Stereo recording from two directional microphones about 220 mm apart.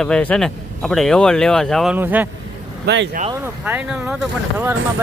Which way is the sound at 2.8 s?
55° right (ahead or behind).